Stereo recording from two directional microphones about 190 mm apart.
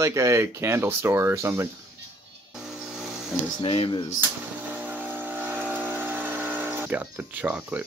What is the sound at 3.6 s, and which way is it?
Speech, 30° left (ahead or behind).